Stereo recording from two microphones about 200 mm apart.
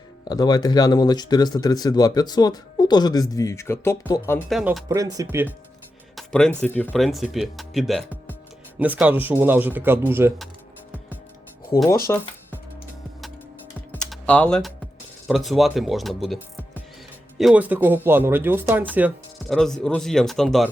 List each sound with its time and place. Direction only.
0.3 s speech: 20° left (ahead or behind)
4.4 s speech: centre (ahead or behind)
4.9 s speech: 15° right (ahead or behind)
6.1 s music: 5° left (ahead or behind)
6.6 s speech: 10° left (ahead or behind); by 10.3 s 10° right (ahead or behind)
12.1 s speech: 15° left (ahead or behind)
13.9 s typing: 5° left (ahead or behind)
15.3 s speech: centre (ahead or behind)
17.3 s speech: 5° right (ahead or behind)